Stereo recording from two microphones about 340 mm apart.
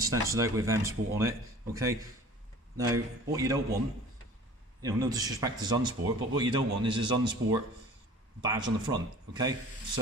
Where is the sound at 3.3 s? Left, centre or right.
Centre.